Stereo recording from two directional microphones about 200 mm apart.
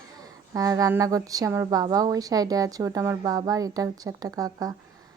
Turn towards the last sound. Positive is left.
turn(degrees=-15)  # may be behind; listen again after turning